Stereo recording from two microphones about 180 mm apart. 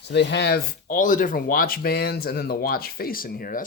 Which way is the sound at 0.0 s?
70° left (ahead or behind).